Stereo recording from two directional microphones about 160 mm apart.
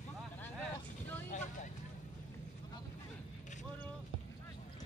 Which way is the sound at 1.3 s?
50° left (ahead or behind).